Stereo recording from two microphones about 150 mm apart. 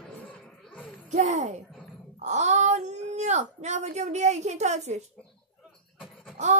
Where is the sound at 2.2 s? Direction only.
50° right (ahead or behind).